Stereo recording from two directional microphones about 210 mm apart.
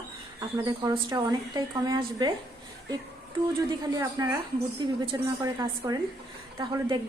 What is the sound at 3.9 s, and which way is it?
A woman's voice, 15° right (ahead or behind).